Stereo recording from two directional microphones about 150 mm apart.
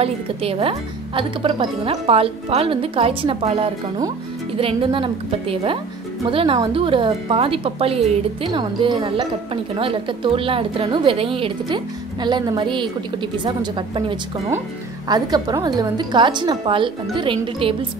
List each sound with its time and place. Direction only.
0.0 s a woman's voice: 40° right (ahead or behind)
8.5 s a woman's voice: 30° right (ahead or behind)